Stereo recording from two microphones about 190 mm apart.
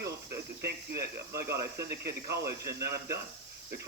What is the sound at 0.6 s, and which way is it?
Speech, 55° right (ahead or behind).